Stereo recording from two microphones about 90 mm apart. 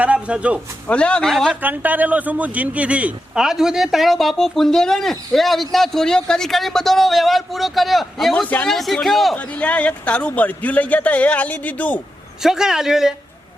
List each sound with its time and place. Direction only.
0.0 s a man's voice: 15° right (ahead or behind)
0.9 s speech: 10° left (ahead or behind)
1.6 s speech: 20° right (ahead or behind); by 9.3 s 5° left (ahead or behind)
9.3 s speech: 15° left (ahead or behind)
12.4 s speech: 5° right (ahead or behind)